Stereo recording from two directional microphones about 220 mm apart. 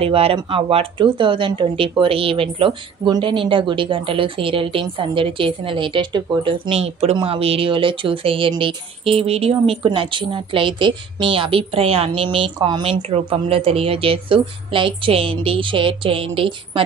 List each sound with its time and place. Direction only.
0.0 s speech: 25° right (ahead or behind)